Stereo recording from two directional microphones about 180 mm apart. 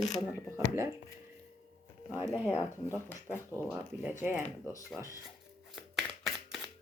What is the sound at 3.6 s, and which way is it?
Speech, 10° right (ahead or behind).